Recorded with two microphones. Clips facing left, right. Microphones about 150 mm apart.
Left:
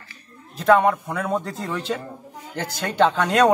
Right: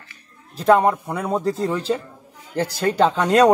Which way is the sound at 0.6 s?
30° right (ahead or behind).